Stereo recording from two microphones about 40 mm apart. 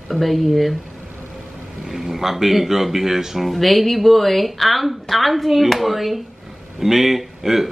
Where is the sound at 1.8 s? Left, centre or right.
Centre.